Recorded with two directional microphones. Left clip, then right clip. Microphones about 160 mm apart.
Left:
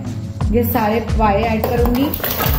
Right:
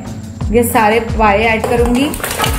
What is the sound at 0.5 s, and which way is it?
Speech, 20° right (ahead or behind).